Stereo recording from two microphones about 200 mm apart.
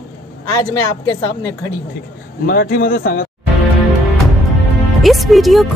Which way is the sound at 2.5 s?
50° left (ahead or behind).